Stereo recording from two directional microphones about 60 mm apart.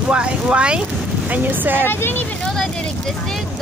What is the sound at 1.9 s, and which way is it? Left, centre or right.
Speech, left.